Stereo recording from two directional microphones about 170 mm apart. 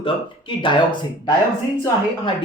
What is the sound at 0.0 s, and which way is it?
Speech, 30° left (ahead or behind).